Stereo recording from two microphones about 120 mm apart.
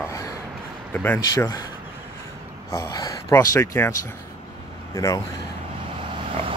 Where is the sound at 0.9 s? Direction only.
15° left (ahead or behind).